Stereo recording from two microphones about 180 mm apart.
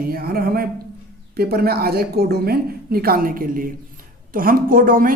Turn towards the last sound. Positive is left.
turn(degrees=-50)  # may be behind; listen again after turning